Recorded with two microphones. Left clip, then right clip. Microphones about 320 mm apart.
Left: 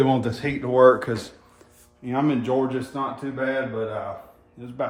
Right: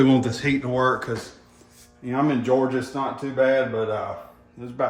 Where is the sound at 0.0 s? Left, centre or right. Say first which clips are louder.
Right 2 dB; centre.